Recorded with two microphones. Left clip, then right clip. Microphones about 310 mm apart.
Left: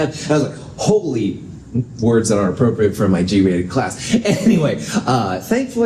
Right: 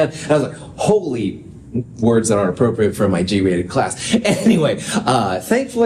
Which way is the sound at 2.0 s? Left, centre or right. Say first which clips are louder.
Even; right.